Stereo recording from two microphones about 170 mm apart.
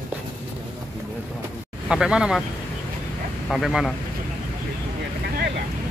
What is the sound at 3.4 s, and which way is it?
Speech, centre (ahead or behind).